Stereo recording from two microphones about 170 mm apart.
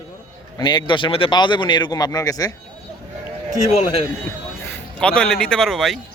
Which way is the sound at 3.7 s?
40° left (ahead or behind).